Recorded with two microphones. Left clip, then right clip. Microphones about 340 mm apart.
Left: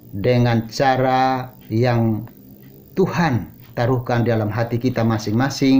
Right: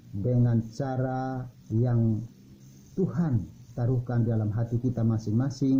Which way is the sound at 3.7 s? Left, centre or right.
Centre.